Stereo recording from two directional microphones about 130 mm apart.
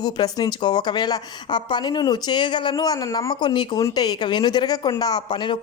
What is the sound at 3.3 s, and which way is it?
A woman's voice, 35° left (ahead or behind).